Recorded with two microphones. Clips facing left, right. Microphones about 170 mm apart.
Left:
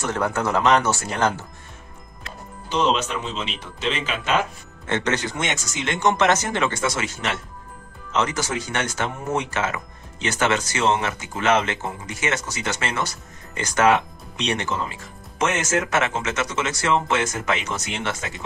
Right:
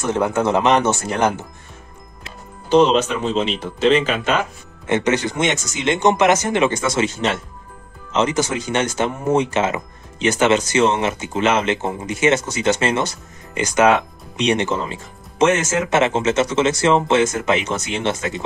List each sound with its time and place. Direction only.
0.1 s speech: 20° right (ahead or behind)
2.7 s speech: 35° right (ahead or behind)
4.8 s speech: 15° right (ahead or behind)